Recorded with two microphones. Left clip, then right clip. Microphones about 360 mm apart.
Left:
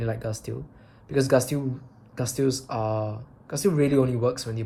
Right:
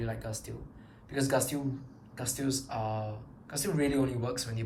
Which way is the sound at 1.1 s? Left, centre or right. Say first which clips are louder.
Left 8 dB; centre.